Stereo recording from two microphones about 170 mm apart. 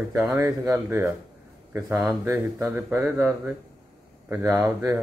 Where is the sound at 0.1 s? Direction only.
15° right (ahead or behind).